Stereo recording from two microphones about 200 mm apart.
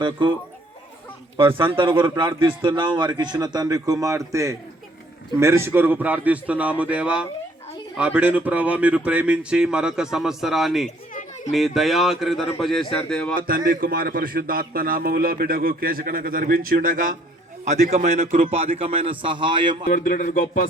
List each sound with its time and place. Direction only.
0.0 s a man's voice: 25° right (ahead or behind)
1.4 s a man's voice: 25° right (ahead or behind); by 10.8 s centre (ahead or behind)
11.1 s chatter: 40° left (ahead or behind)
11.5 s speech: centre (ahead or behind)
13.5 s a man's voice: 45° right (ahead or behind); by 19.8 s 25° right (ahead or behind)
19.9 s a man's voice: 40° left (ahead or behind)